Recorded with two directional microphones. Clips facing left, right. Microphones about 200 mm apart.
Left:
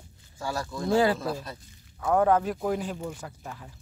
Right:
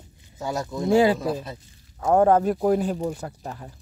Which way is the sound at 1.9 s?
35° right (ahead or behind).